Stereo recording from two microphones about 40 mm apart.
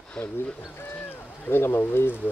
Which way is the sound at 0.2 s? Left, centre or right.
Centre.